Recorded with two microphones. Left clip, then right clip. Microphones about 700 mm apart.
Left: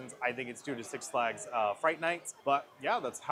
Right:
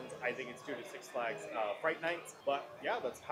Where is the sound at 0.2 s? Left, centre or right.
Left.